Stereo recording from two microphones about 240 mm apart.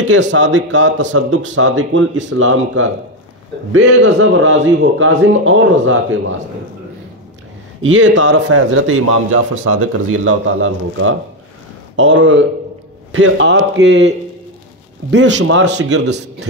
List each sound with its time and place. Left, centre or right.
0.1 s a man's voice: right
7.8 s a man's voice: right